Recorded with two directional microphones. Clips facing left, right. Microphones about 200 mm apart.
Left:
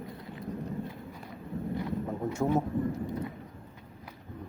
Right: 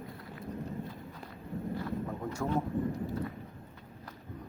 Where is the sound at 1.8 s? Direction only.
20° left (ahead or behind).